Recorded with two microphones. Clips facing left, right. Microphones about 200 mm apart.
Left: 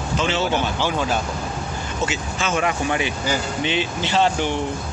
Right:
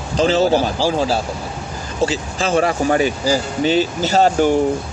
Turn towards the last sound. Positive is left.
turn(degrees=-45)  # may be behind; listen again after turning